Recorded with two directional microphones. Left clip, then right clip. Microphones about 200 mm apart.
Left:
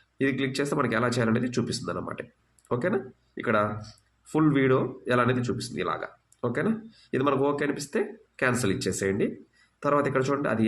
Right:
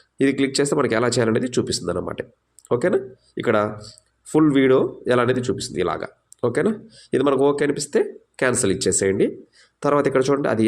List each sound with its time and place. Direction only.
0.2 s speech: 30° right (ahead or behind)